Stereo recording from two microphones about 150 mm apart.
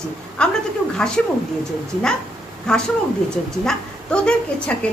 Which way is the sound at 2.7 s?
5° left (ahead or behind).